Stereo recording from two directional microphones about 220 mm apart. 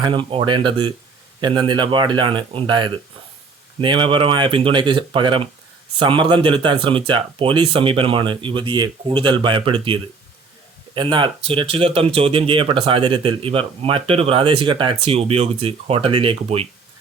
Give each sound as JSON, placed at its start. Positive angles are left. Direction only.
{"t": 0.0, "sound": "speech", "side_deg": -25}